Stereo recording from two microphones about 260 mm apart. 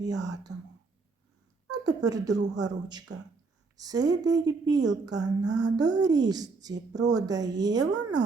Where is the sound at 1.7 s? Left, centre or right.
Centre.